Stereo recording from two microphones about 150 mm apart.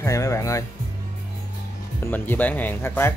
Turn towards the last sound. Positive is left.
turn(degrees=15)  # may be behind; listen again after turning